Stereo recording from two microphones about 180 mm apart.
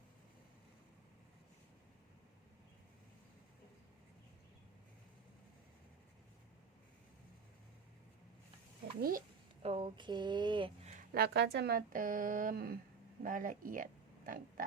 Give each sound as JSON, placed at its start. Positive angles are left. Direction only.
{"t": 9.0, "sound": "speech", "side_deg": -55}
{"t": 9.6, "sound": "a sound", "side_deg": -30}
{"t": 11.1, "sound": "speech", "side_deg": -60}